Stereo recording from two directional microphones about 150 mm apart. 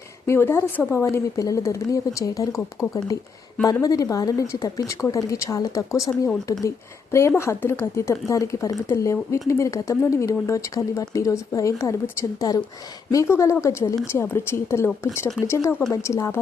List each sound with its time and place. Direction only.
0.3 s a woman's voice: 15° left (ahead or behind)